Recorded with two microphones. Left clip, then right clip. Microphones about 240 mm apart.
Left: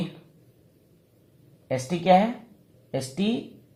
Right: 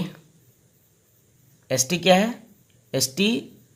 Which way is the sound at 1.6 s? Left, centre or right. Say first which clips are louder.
Right 3 dB; right.